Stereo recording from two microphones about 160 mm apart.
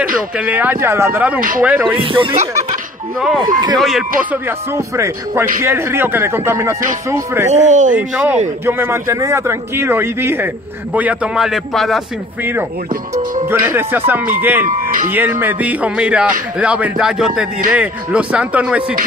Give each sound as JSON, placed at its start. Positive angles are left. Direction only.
{"t": 0.4, "sound": "a man's voice", "side_deg": -10}
{"t": 2.0, "sound": "speech", "side_deg": -30}
{"t": 2.3, "sound": "speech", "side_deg": -50}
{"t": 3.2, "sound": "speech", "side_deg": 0}
{"t": 3.4, "sound": "speech", "side_deg": -25}
{"t": 4.2, "sound": "a man's voice", "side_deg": -10}
{"t": 7.6, "sound": "speech", "side_deg": -50}
{"t": 7.9, "sound": "a man's voice", "side_deg": -10}
{"t": 13.5, "sound": "a man's voice", "side_deg": -15}